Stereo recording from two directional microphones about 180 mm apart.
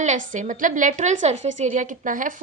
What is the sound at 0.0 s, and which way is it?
A woman's voice, 40° right (ahead or behind).